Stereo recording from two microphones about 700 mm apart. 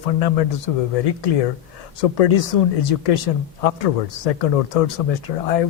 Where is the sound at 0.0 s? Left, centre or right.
Left.